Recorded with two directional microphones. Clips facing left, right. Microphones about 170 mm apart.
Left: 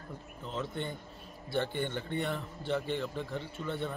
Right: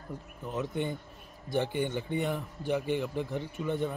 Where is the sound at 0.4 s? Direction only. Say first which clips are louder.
Right 4 dB; 15° right (ahead or behind).